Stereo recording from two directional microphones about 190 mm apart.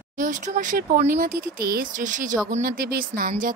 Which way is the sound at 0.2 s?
45° right (ahead or behind).